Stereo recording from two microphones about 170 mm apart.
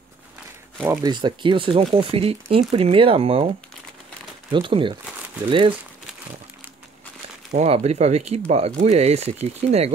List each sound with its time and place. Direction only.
1.0 s speech: 25° right (ahead or behind)
4.5 s speech: 30° right (ahead or behind)
7.5 s speech: 40° right (ahead or behind)